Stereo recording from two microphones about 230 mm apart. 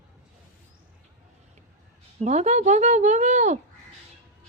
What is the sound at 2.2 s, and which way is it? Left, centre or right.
Speech, right.